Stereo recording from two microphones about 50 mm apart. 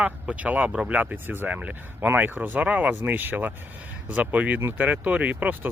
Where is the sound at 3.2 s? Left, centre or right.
Right.